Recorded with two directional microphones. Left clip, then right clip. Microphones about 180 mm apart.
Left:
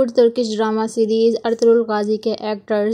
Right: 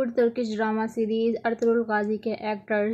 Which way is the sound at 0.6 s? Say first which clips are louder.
Left 7 dB; 30° left (ahead or behind).